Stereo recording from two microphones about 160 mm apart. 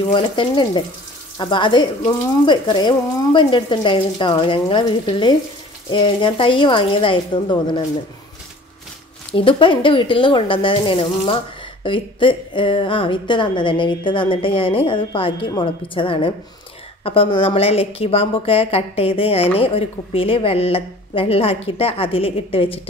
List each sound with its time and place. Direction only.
0.1 s speech: 30° left (ahead or behind)
9.3 s speech: 35° left (ahead or behind)